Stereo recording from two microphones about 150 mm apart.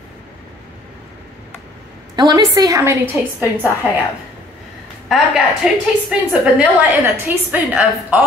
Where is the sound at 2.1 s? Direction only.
25° right (ahead or behind).